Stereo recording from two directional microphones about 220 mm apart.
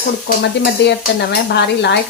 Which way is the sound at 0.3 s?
50° left (ahead or behind).